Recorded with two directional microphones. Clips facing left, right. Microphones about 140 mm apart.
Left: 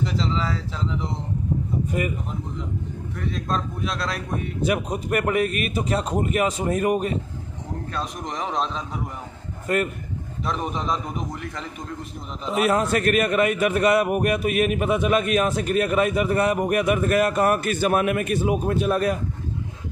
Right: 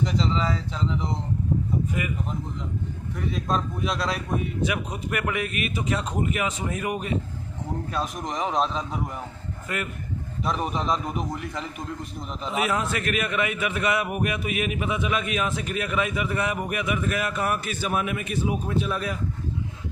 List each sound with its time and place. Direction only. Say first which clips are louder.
0.0 s speech: even; centre (ahead or behind)
3.2 s speech: even; 5° right (ahead or behind)
4.6 s a man's voice: left 5 dB; 40° left (ahead or behind)
7.9 s speech: even; centre (ahead or behind)
9.7 s a man's voice: left 9 dB; 40° left (ahead or behind)
10.4 s speech: even; centre (ahead or behind)
12.5 s a man's voice: left 6 dB; 45° left (ahead or behind)